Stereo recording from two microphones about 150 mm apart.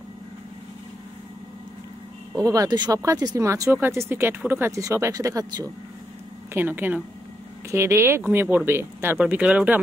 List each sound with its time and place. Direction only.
2.3 s speech: 20° right (ahead or behind)
6.5 s speech: 15° right (ahead or behind)